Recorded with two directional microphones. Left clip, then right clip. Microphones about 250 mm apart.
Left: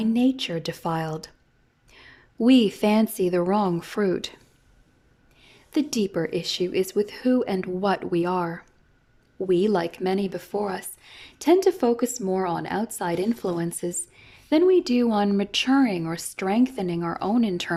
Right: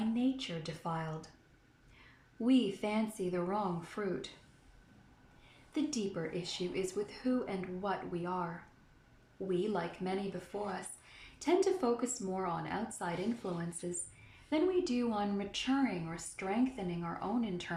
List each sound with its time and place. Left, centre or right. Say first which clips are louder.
0.1 s speech: left 12 dB; left
2.4 s speech: left 13 dB; left
5.7 s speech: left 12 dB; left
9.5 s speech: left 13 dB; left